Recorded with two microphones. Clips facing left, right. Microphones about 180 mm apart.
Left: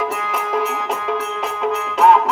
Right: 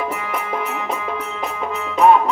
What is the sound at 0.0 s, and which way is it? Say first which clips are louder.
Music: left 2 dB; 85° left.